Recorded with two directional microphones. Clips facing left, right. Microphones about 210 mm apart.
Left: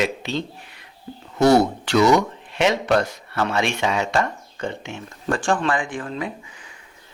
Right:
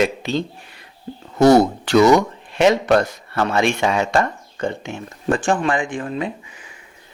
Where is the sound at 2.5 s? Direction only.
45° right (ahead or behind).